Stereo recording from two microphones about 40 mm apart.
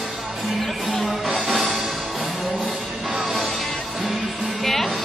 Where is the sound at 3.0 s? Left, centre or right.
Centre.